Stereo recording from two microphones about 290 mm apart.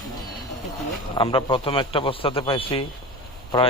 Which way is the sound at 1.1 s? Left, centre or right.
Centre.